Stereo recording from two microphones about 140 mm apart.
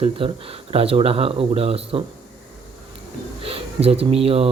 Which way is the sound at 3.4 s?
45° right (ahead or behind).